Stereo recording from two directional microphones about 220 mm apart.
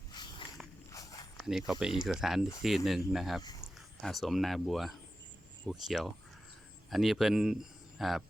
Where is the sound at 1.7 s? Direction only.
5° right (ahead or behind).